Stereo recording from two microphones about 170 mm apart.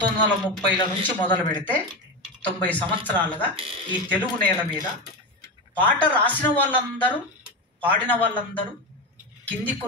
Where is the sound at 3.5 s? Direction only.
30° right (ahead or behind).